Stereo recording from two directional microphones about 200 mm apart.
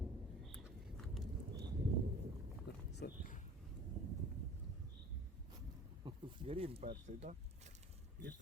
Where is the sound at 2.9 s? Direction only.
55° left (ahead or behind).